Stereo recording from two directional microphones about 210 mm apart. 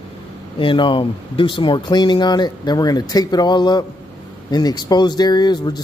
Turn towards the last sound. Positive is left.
turn(degrees=20)  # may be behind; listen again after turning